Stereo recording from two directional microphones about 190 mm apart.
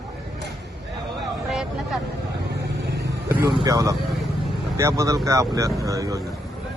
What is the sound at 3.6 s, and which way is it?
Speech, 20° right (ahead or behind).